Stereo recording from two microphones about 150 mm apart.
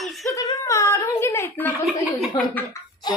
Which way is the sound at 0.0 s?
Centre (ahead or behind).